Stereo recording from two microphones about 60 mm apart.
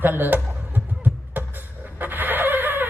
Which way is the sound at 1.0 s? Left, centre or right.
Right.